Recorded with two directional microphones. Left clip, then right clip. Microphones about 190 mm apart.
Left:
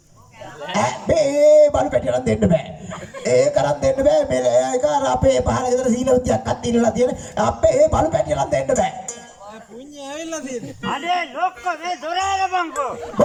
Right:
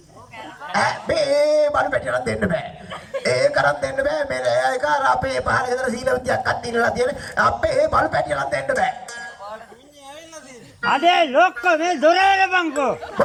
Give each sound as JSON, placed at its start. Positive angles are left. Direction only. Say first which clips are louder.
{"t": 0.7, "sound": "a man's voice", "louder": "left 1 dB", "side_deg": 15}
{"t": 3.2, "sound": "music", "louder": "left 1 dB", "side_deg": 15}
{"t": 10.8, "sound": "a man's voice", "louder": "right 6 dB", "side_deg": -60}